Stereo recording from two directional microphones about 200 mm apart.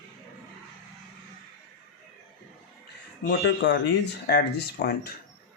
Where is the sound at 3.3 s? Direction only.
60° left (ahead or behind).